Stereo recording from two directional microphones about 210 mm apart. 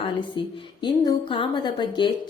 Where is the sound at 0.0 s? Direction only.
25° left (ahead or behind).